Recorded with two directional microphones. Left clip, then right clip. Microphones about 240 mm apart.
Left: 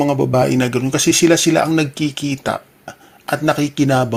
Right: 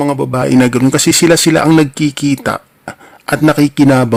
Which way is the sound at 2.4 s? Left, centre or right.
Right.